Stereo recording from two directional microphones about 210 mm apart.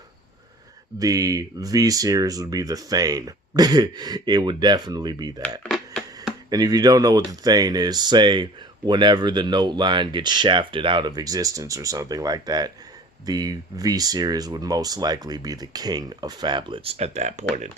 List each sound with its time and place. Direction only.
0.9 s speech: 15° right (ahead or behind)
5.6 s a sound: centre (ahead or behind)
6.5 s speech: 20° right (ahead or behind); by 17.7 s 35° right (ahead or behind)